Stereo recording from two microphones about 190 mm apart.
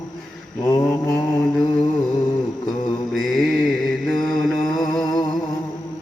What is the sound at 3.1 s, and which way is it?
Mantra, centre (ahead or behind).